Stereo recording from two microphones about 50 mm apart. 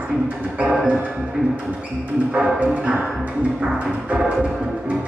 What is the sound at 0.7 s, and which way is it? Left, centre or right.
Music, centre.